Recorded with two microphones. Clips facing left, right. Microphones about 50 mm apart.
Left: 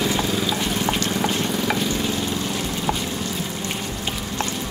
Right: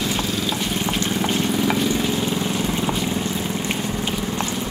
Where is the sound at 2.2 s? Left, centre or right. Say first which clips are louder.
Right 3 dB; centre.